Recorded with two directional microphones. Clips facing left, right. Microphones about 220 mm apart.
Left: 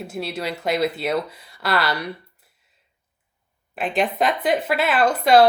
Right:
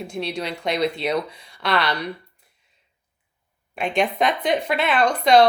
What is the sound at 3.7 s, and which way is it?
Speech, centre (ahead or behind).